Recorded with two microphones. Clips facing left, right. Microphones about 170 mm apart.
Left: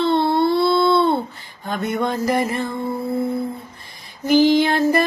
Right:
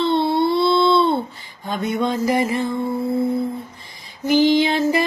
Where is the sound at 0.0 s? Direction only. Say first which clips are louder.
Left 1 dB; 55° left (ahead or behind).